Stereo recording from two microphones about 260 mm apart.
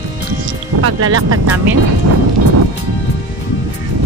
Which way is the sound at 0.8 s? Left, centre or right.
Right.